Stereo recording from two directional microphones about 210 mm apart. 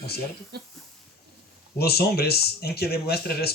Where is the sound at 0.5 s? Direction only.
50° right (ahead or behind).